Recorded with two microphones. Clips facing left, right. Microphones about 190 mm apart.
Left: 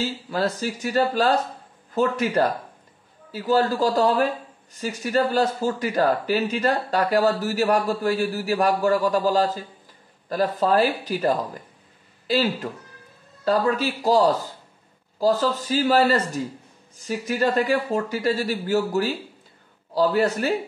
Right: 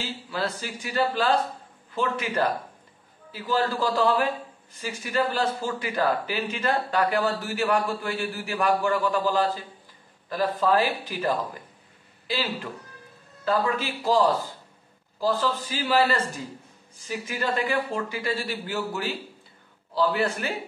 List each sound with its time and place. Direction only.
0.0 s speech: 45° left (ahead or behind)
13.5 s speech: 40° left (ahead or behind)